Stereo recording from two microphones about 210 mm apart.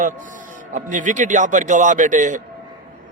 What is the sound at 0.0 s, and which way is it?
A man's voice, 40° right (ahead or behind).